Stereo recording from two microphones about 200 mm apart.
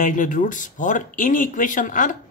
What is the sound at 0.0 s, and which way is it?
Speech, 40° left (ahead or behind).